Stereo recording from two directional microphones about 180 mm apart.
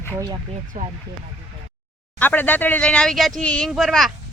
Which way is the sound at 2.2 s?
10° left (ahead or behind).